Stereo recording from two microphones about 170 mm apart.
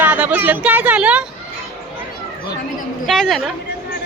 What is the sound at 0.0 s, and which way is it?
Speech, 10° right (ahead or behind).